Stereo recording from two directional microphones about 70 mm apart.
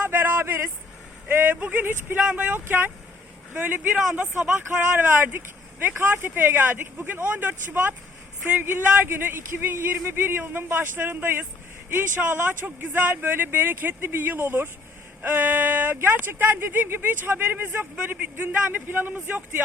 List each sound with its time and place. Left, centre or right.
0.0 s a sound: right
1.3 s speech: right
2.2 s speech: centre